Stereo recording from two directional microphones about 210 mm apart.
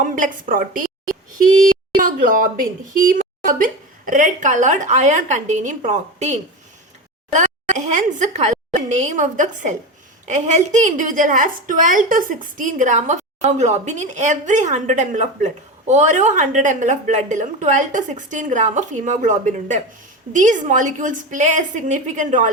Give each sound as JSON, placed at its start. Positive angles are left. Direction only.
{"t": 0.0, "sound": "a woman's voice", "side_deg": -40}
{"t": 2.0, "sound": "a woman's voice", "side_deg": -40}